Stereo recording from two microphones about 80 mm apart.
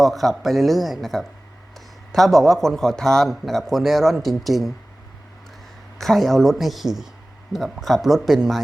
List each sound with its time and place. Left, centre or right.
0.0 s speech: centre
6.0 s speech: centre